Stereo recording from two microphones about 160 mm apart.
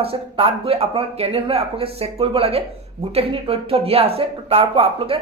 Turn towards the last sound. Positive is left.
turn(degrees=-35)  # may be behind; listen again after turning